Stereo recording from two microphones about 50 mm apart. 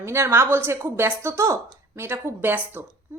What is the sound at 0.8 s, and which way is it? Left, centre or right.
Speech, right.